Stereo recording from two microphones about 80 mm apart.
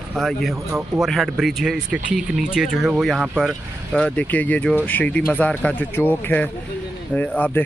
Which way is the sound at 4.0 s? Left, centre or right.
Centre.